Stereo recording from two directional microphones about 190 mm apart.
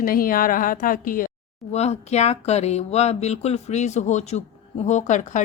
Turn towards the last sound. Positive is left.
turn(degrees=40)  # may be behind; listen again after turning